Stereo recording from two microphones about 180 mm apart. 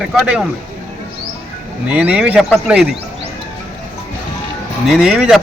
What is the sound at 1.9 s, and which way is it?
Speech, 10° right (ahead or behind).